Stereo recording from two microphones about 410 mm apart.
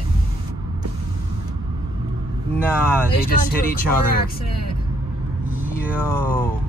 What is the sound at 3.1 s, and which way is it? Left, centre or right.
Speech, left.